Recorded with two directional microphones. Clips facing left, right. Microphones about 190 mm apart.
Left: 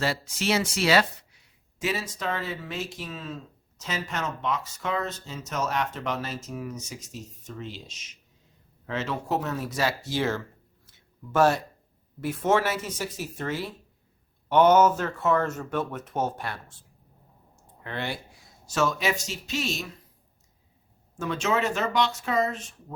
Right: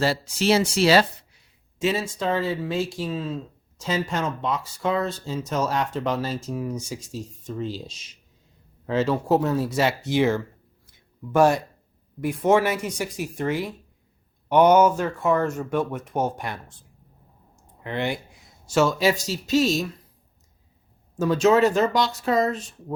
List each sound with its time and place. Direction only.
0.0 s speech: 30° right (ahead or behind); by 10.4 s 15° right (ahead or behind)
10.8 s a sound: 15° right (ahead or behind)
12.2 s speech: 15° right (ahead or behind)
17.6 s clicking: 15° right (ahead or behind)
18.6 s speech: 30° right (ahead or behind)
21.2 s speech: 35° right (ahead or behind)